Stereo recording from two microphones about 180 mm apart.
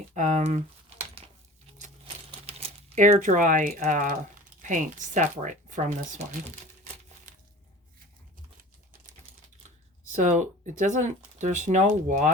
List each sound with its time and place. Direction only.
0.1 s a sound: 40° right (ahead or behind)
2.5 s speech: 35° right (ahead or behind)
10.1 s speech: 45° right (ahead or behind)